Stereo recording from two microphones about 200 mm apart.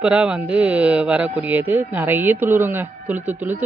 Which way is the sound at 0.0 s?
5° right (ahead or behind).